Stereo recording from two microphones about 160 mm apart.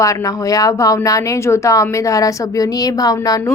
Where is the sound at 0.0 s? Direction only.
20° left (ahead or behind).